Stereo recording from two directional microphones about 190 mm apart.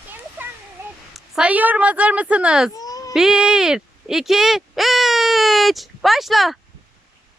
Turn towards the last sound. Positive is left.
turn(degrees=0)  # may be behind; listen again after turning